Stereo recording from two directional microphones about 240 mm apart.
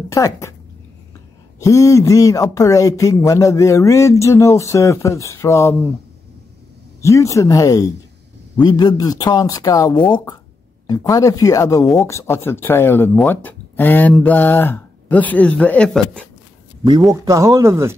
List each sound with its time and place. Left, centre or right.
0.1 s speech: centre
1.6 s speech: centre
7.0 s speech: centre
17.1 s speech: centre